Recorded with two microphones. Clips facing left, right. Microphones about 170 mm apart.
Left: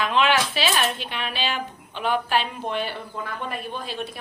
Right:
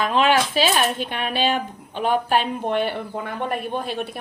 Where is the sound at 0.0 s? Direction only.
45° right (ahead or behind).